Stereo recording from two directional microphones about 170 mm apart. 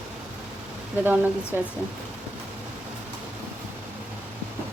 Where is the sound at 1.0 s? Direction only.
10° right (ahead or behind).